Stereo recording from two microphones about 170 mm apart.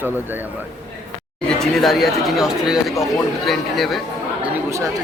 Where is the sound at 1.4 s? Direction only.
Centre (ahead or behind).